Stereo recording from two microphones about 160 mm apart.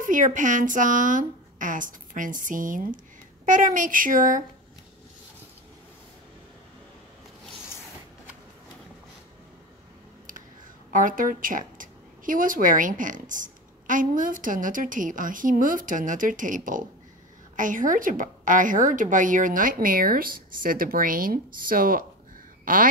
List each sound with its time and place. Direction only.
0.0 s speech: 55° right (ahead or behind)
10.9 s speech: 55° right (ahead or behind)